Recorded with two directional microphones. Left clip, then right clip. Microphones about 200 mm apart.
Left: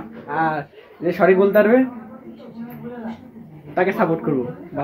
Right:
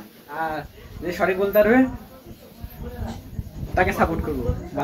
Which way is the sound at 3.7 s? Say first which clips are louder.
Left 2 dB; centre (ahead or behind).